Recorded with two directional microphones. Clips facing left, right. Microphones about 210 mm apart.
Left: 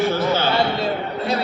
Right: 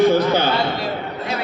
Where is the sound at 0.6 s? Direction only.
25° left (ahead or behind).